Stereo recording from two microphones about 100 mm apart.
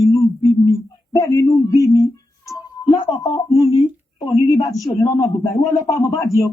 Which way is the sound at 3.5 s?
35° left (ahead or behind).